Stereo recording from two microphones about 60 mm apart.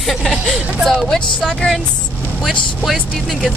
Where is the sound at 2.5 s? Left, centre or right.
Centre.